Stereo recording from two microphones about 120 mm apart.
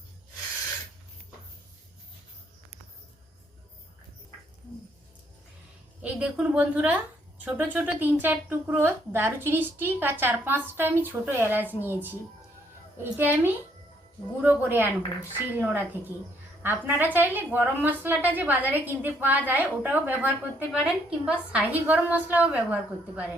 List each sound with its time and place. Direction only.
6.0 s a woman's voice: 10° right (ahead or behind)
13.0 s a woman's voice: 15° right (ahead or behind)
16.6 s a woman's voice: 15° right (ahead or behind)